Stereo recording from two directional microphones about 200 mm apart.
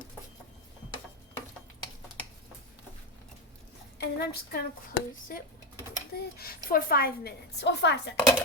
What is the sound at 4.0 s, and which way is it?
A woman's voice, 55° left (ahead or behind).